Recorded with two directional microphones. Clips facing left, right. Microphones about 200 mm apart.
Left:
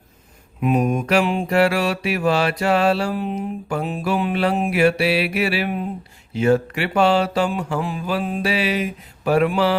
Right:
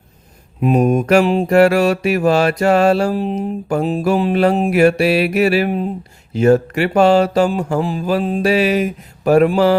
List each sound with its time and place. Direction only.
0.6 s mantra: 40° right (ahead or behind)